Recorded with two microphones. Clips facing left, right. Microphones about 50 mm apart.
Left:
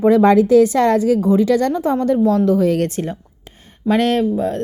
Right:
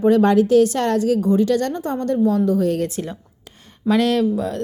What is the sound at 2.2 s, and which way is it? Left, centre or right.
Speech, left.